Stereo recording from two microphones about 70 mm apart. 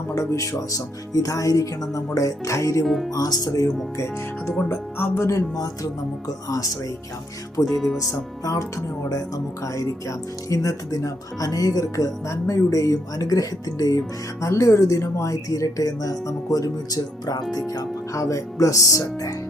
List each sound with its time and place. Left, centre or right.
0.1 s speech: left
2.8 s speech: centre
3.1 s speech: left
3.9 s speech: left
5.5 s speech: left
7.6 s speech: centre
9.0 s speech: left
14.4 s speech: left
18.1 s speech: left